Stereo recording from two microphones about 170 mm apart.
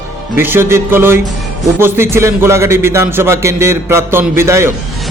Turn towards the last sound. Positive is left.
turn(degrees=-15)  # may be behind; listen again after turning